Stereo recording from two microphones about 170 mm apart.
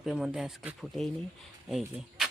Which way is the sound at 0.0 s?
Centre (ahead or behind).